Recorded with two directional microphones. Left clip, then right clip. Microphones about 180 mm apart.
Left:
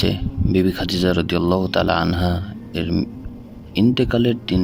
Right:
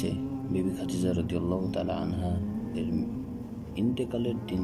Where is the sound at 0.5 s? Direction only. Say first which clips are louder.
Left 13 dB; 60° left (ahead or behind).